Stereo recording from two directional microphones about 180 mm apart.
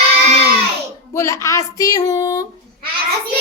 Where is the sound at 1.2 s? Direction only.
15° left (ahead or behind).